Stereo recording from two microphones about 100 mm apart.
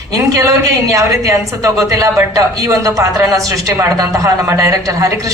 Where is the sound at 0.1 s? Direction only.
30° right (ahead or behind).